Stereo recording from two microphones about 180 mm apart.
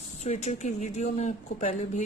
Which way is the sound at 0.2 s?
40° left (ahead or behind).